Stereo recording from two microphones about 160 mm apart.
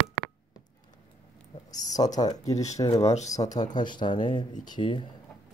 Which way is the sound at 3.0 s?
45° left (ahead or behind).